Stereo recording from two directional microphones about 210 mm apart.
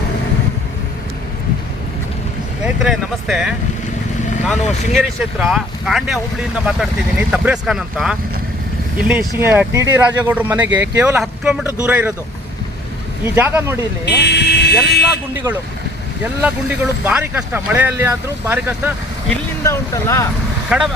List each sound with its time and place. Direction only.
2.6 s speech: centre (ahead or behind)
4.9 s speech: centre (ahead or behind)
13.2 s speech: 10° right (ahead or behind)
14.0 s speech: 55° left (ahead or behind)
16.2 s speech: 5° right (ahead or behind)
19.6 s speech: 15° left (ahead or behind)
20.7 s speech: 5° right (ahead or behind)